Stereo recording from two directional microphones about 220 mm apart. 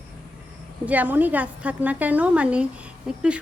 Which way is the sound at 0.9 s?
5° right (ahead or behind).